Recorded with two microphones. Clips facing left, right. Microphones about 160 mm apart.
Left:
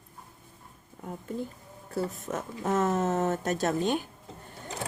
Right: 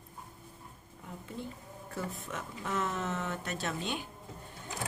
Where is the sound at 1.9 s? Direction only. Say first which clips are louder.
Left 8 dB; 40° left (ahead or behind).